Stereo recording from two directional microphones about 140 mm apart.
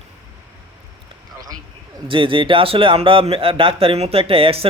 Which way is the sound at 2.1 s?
35° right (ahead or behind).